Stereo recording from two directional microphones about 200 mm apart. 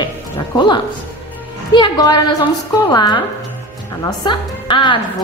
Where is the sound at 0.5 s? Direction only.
20° left (ahead or behind).